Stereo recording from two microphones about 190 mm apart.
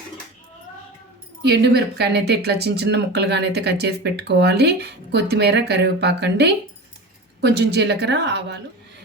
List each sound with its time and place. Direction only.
1.4 s a woman's voice: 60° right (ahead or behind)